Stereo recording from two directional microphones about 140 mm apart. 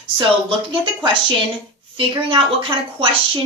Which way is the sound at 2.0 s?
40° right (ahead or behind).